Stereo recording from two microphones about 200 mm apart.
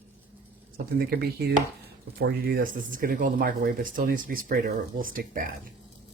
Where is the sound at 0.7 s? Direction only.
45° right (ahead or behind).